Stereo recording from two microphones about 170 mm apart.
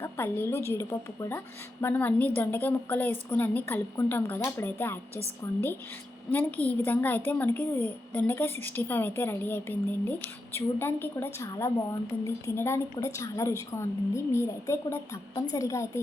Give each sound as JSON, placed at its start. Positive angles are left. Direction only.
{"t": 0.0, "sound": "a woman's voice", "side_deg": 15}
{"t": 6.3, "sound": "a woman's voice", "side_deg": 10}